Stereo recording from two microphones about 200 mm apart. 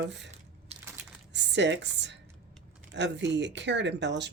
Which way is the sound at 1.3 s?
60° right (ahead or behind).